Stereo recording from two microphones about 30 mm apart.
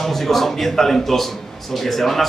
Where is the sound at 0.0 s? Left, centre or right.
Centre.